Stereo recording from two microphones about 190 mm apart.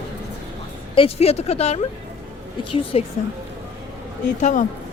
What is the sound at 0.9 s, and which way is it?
Speech, 30° left (ahead or behind).